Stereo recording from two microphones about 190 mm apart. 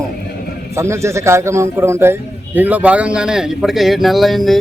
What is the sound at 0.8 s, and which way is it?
A man's voice, 15° right (ahead or behind).